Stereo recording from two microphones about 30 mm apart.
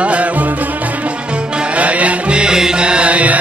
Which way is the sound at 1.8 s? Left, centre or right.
Right.